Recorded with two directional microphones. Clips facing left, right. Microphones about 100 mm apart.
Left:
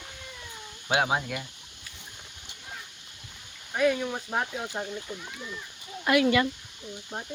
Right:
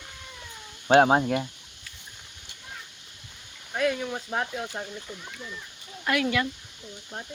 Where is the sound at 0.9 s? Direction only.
45° right (ahead or behind).